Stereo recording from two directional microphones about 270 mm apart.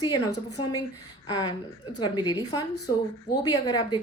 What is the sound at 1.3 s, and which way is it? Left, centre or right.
A woman's voice, centre.